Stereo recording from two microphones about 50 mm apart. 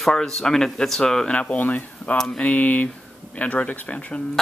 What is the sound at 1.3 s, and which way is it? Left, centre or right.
Speech, left.